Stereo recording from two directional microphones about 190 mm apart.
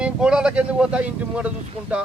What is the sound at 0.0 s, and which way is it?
Speech, 5° right (ahead or behind).